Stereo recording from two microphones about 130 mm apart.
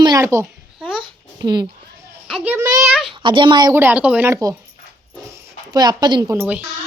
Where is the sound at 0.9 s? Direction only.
35° right (ahead or behind).